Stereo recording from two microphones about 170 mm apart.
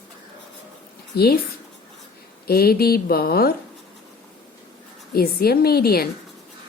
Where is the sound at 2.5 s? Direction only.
65° left (ahead or behind).